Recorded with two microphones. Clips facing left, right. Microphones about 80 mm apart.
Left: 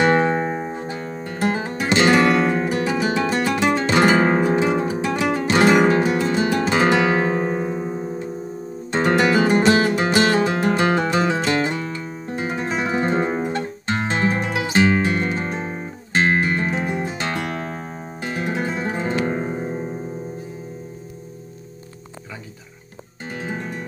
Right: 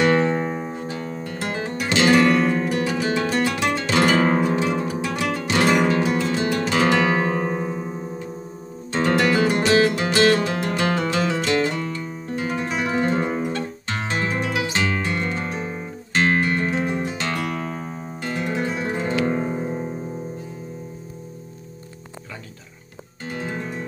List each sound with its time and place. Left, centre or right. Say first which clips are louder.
0.0 s music: left 1 dB; left
8.9 s music: left 2 dB; left
23.4 s music: left 1 dB; centre